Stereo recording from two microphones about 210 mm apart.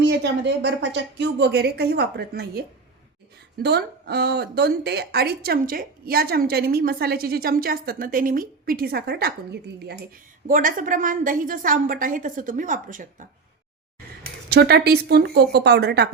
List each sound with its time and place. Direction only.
0.0 s speech: 55° right (ahead or behind)
10.4 s a woman's voice: 40° right (ahead or behind)
14.5 s speech: 50° right (ahead or behind)